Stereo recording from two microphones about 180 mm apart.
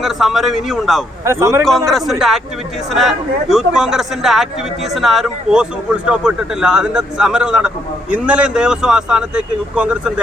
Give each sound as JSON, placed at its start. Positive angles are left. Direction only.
{"t": 0.0, "sound": "speech", "side_deg": 0}
{"t": 1.2, "sound": "speech", "side_deg": -15}
{"t": 1.9, "sound": "speech", "side_deg": 0}